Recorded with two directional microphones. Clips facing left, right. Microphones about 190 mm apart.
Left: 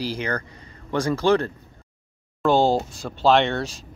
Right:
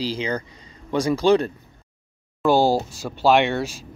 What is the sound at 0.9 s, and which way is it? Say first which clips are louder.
Speech: right 2 dB; 10° right (ahead or behind).